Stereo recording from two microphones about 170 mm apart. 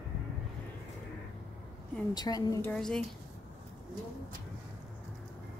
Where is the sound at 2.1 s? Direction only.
25° left (ahead or behind).